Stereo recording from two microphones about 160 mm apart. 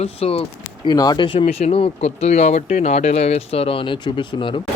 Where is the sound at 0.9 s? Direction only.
25° left (ahead or behind).